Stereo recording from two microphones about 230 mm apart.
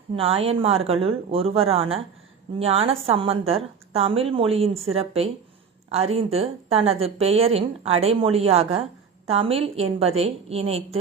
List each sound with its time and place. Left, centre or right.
0.2 s a woman's voice: right